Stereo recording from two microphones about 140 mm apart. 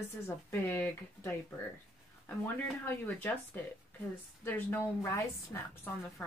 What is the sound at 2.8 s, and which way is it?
A woman's voice, 15° left (ahead or behind).